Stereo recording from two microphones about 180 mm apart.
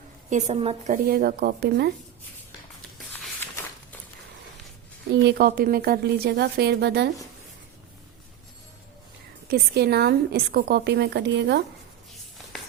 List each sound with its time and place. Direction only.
0.3 s a woman's voice: 40° right (ahead or behind)
1.0 s a woman's voice: 55° right (ahead or behind)
5.2 s a woman's voice: 65° right (ahead or behind)
9.5 s a woman's voice: 65° right (ahead or behind)